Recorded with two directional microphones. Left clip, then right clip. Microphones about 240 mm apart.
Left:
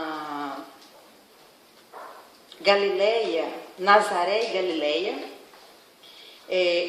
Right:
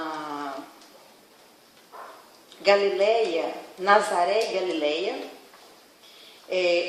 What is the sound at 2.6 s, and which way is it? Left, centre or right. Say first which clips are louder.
Speech: even; left.